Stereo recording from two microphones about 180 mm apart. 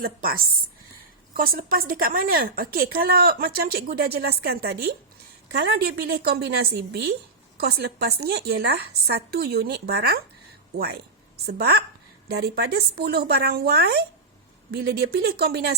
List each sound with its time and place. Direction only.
1.3 s speech: 55° right (ahead or behind)
11.4 s speech: 60° right (ahead or behind)